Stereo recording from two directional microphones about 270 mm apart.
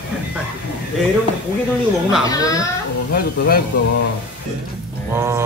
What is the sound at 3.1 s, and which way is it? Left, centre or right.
Speech, left.